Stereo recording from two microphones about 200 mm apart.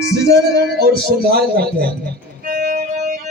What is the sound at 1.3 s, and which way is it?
Speech, 50° right (ahead or behind).